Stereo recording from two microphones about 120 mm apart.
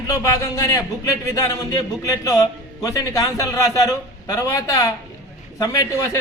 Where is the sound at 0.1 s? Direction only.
30° left (ahead or behind).